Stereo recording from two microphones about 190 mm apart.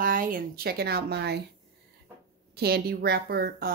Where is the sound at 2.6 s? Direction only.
55° right (ahead or behind).